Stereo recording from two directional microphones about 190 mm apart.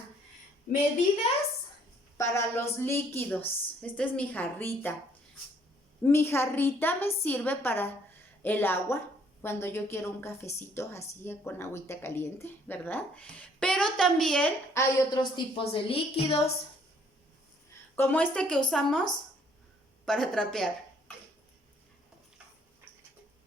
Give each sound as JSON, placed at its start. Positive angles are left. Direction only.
{"t": 2.1, "sound": "speech", "side_deg": 15}
{"t": 6.0, "sound": "a woman's voice", "side_deg": 10}
{"t": 17.9, "sound": "speech", "side_deg": 10}
{"t": 20.1, "sound": "speech", "side_deg": 0}